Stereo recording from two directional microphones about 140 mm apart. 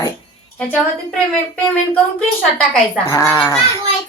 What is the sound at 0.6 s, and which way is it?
A woman's voice, 5° left (ahead or behind).